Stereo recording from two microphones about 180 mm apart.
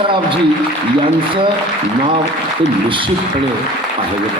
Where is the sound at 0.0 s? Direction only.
30° right (ahead or behind).